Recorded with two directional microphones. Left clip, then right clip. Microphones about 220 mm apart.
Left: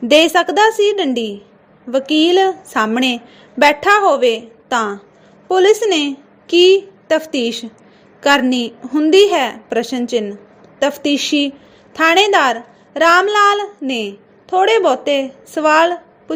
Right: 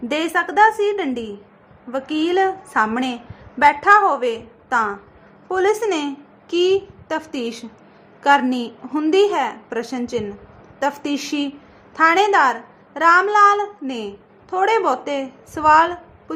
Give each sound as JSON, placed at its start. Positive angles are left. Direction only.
{"t": 0.1, "sound": "a woman's voice", "side_deg": 25}